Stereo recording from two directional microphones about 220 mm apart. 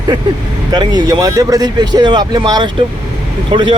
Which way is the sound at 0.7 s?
20° right (ahead or behind).